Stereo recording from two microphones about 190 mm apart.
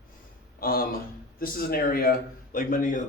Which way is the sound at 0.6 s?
50° left (ahead or behind).